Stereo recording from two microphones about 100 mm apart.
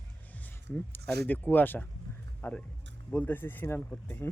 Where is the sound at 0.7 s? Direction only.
15° left (ahead or behind).